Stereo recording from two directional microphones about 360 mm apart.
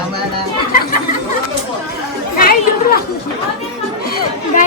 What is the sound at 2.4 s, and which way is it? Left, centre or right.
Chatter, left.